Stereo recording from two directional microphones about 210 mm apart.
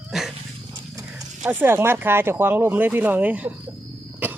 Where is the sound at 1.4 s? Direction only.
10° right (ahead or behind).